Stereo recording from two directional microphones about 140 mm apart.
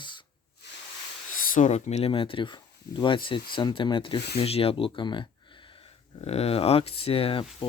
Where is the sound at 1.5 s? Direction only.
55° left (ahead or behind); by 5.3 s 35° left (ahead or behind).